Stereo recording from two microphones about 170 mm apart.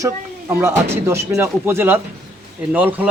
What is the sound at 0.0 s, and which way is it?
Speech, 15° right (ahead or behind).